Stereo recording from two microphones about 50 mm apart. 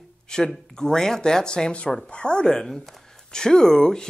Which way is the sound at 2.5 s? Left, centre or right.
Centre.